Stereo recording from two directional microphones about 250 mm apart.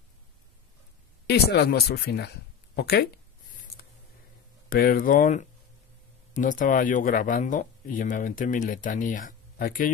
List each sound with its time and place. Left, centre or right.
1.2 s speech: left
4.6 s speech: left